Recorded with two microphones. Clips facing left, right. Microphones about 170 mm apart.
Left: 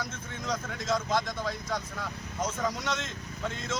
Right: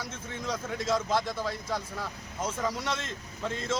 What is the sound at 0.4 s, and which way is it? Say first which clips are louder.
Speech: right 1 dB; 5° right (ahead or behind).